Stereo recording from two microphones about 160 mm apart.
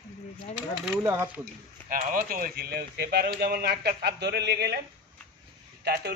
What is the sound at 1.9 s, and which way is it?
Speech, 60° right (ahead or behind).